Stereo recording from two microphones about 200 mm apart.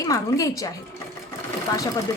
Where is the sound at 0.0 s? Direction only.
15° left (ahead or behind).